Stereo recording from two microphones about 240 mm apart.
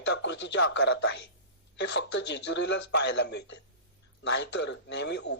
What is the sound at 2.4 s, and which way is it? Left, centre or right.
A man's voice, left.